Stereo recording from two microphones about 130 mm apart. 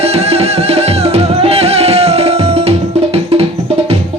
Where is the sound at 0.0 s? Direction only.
50° right (ahead or behind).